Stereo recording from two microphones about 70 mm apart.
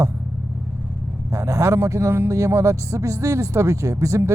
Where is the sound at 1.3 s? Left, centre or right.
Right.